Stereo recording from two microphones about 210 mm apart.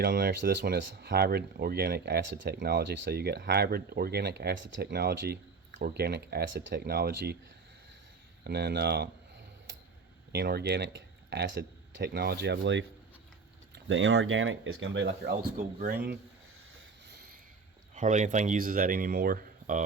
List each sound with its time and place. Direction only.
0.0 s speech: 50° right (ahead or behind)
8.4 s speech: 50° right (ahead or behind)
10.3 s speech: 50° right (ahead or behind)
15.3 s speech: 40° right (ahead or behind)
17.9 s speech: 35° right (ahead or behind)